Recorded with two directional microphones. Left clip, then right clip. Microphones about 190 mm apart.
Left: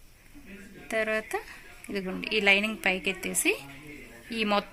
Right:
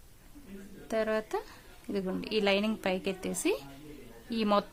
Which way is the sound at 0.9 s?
30° right (ahead or behind).